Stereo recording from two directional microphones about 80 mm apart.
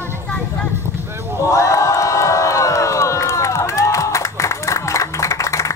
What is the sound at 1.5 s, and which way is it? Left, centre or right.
Crowd, left.